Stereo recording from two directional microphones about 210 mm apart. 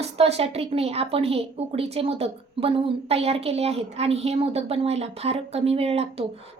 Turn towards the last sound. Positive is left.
turn(degrees=-30)  # may be behind; listen again after turning